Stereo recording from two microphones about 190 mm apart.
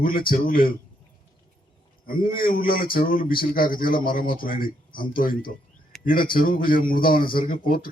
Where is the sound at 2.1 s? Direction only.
50° left (ahead or behind).